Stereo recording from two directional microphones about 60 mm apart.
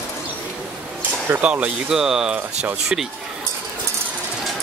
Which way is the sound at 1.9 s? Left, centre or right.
Centre.